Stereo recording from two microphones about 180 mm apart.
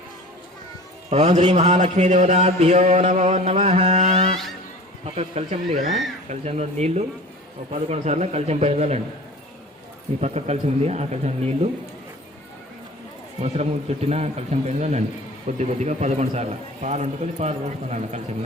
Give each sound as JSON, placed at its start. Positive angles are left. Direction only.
{"t": 1.1, "sound": "a man's voice", "side_deg": -40}
{"t": 10.2, "sound": "a man's voice", "side_deg": -40}
{"t": 13.4, "sound": "a man's voice", "side_deg": -35}